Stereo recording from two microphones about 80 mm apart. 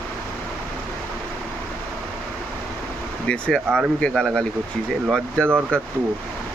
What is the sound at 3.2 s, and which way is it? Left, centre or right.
Speech, centre.